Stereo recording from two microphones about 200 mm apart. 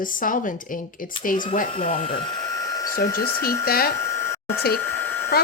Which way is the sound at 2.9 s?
50° left (ahead or behind).